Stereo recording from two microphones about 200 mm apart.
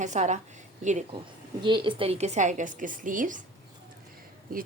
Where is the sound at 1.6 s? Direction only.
25° right (ahead or behind); by 3.4 s 40° right (ahead or behind).